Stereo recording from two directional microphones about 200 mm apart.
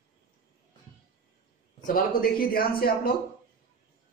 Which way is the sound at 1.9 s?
45° left (ahead or behind).